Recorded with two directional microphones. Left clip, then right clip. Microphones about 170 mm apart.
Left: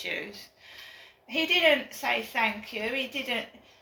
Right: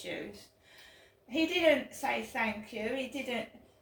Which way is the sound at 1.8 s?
20° right (ahead or behind).